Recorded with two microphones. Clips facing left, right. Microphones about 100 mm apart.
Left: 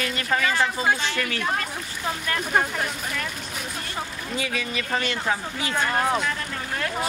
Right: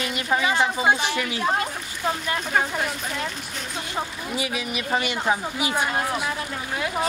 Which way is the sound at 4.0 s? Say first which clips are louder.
Right 3 dB; 15° right (ahead or behind).